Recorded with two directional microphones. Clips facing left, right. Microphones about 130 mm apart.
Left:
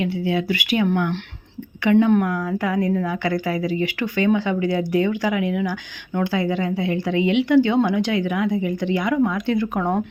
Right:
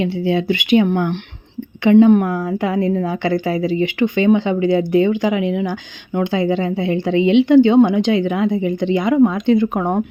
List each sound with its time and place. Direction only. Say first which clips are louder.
0.0 s a woman's voice: right 4 dB; 25° right (ahead or behind)